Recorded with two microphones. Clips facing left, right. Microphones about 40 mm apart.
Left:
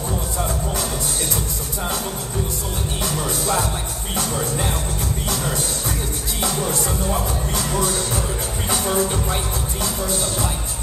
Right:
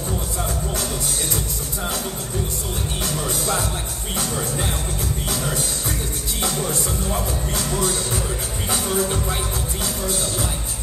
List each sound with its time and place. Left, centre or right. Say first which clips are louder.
3.1 s music: left 1 dB; centre